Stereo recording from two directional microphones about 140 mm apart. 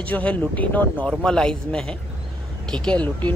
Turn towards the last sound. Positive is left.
turn(degrees=10)  # may be behind; listen again after turning